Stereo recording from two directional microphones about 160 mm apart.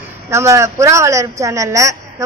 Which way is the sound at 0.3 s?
15° right (ahead or behind).